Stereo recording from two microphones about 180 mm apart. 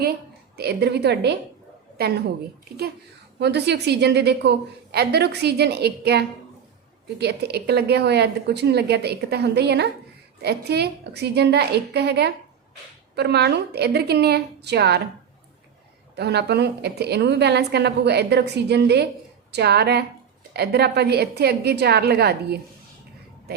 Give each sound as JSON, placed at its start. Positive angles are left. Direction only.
{"t": 0.0, "sound": "a woman's voice", "side_deg": -65}
{"t": 3.3, "sound": "a woman's voice", "side_deg": -70}
{"t": 16.1, "sound": "a woman's voice", "side_deg": -65}